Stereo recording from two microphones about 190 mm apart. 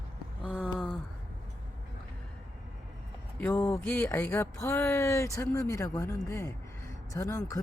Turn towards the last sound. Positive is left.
turn(degrees=15)  # may be behind; listen again after turning